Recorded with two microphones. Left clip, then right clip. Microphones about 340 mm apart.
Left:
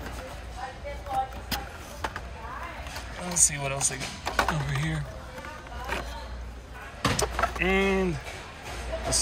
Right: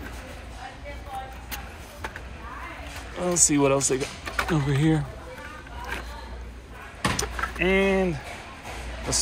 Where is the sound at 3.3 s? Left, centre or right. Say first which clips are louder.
Right 6 dB; centre.